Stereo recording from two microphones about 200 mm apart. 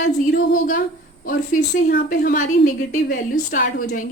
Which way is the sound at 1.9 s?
50° left (ahead or behind).